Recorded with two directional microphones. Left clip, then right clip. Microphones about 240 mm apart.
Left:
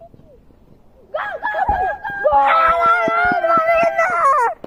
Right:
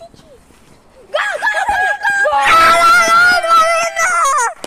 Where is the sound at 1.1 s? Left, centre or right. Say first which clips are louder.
Right 6 dB; centre.